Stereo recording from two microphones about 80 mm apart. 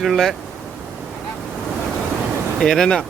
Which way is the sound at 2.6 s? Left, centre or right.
Centre.